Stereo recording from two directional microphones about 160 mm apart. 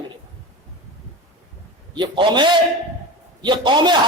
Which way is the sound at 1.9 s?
30° right (ahead or behind).